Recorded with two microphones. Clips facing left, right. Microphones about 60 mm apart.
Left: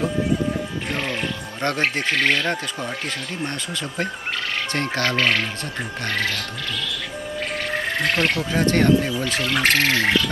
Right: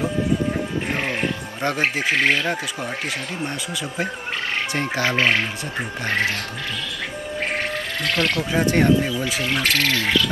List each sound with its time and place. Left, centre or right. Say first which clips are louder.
0.9 s speech: even; right
1.6 s speech: even; centre
4.7 s speech: even; centre
8.0 s speech: even; left
8.5 s speech: even; centre
9.5 s speech: left 2 dB; left